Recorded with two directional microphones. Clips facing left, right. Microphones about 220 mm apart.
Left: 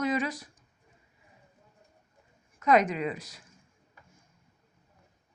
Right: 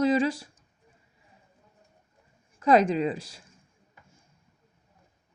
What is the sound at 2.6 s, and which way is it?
Speech, 30° right (ahead or behind).